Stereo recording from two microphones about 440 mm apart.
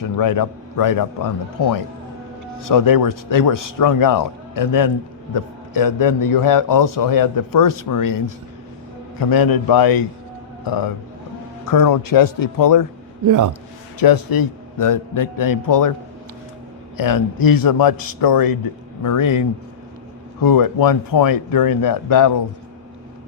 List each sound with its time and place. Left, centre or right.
0.0 s a man's voice: left
9.3 s a man's voice: left
13.2 s a man's voice: right
14.0 s a man's voice: left
17.0 s a man's voice: left